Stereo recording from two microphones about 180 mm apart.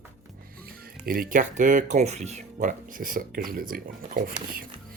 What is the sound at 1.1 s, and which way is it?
Speech, 50° right (ahead or behind).